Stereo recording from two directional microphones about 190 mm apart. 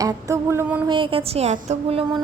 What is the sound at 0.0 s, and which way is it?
Music, 15° right (ahead or behind).